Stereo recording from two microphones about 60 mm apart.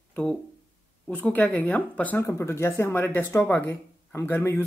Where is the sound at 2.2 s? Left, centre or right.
Left.